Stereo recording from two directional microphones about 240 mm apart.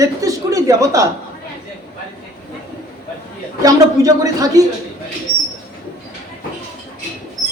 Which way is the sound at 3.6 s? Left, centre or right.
Centre.